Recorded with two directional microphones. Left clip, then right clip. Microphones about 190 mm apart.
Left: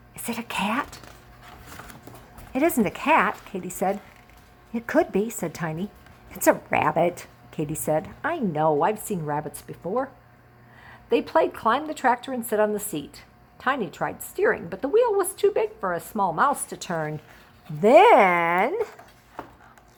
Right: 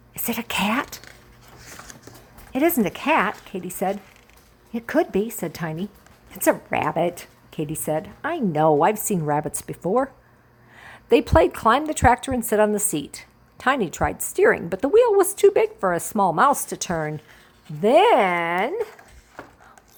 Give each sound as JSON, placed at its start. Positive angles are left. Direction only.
{"t": 0.1, "sound": "a woman's voice", "side_deg": -25}
{"t": 2.5, "sound": "a woman's voice", "side_deg": -15}
{"t": 8.6, "sound": "a woman's voice", "side_deg": -30}
{"t": 17.7, "sound": "speech", "side_deg": -5}